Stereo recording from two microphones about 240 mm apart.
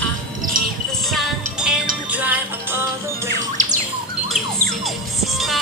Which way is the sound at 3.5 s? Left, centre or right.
Right.